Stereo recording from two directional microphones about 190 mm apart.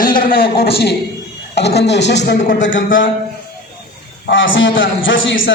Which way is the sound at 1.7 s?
65° left (ahead or behind).